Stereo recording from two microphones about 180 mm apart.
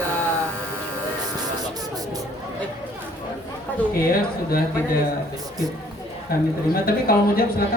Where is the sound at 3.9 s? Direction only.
55° left (ahead or behind).